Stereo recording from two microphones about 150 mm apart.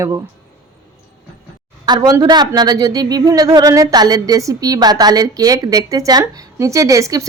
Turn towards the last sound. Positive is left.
turn(degrees=-20)  # may be behind; listen again after turning